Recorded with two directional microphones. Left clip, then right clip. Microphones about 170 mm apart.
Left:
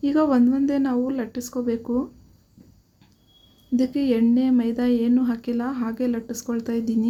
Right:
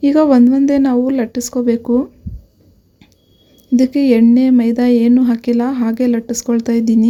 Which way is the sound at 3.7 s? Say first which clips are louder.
Right 10 dB; 40° right (ahead or behind).